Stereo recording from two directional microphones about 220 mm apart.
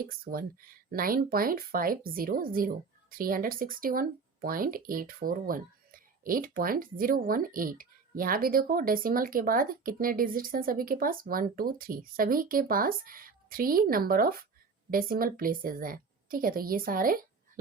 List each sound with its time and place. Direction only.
0.0 s speech: 40° right (ahead or behind)